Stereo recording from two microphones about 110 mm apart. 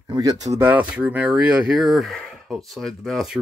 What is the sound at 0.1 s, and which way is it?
Speech, 35° right (ahead or behind).